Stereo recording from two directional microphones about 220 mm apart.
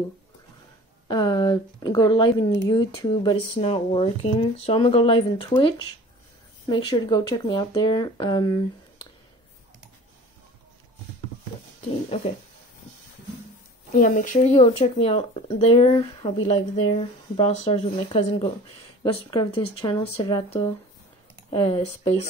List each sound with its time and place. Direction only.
1.0 s speech: 20° left (ahead or behind)
13.9 s speech: 35° left (ahead or behind)